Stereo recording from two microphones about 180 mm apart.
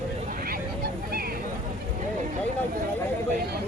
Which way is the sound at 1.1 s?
55° right (ahead or behind).